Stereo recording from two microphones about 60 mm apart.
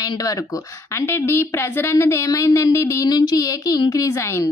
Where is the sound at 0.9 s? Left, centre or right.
Left.